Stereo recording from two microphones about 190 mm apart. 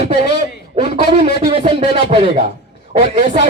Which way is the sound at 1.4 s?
30° right (ahead or behind).